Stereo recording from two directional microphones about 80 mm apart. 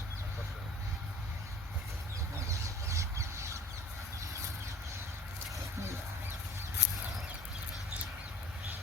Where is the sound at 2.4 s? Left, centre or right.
Right.